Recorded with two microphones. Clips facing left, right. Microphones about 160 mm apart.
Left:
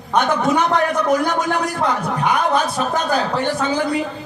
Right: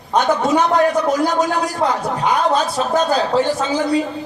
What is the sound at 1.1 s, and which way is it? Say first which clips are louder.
A man's voice: right 1 dB; 60° left (ahead or behind).